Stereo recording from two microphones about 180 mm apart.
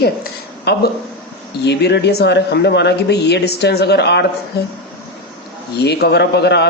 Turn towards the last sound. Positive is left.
turn(degrees=65)  # may be behind; listen again after turning